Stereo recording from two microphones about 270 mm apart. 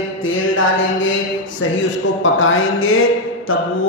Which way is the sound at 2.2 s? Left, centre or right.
Left.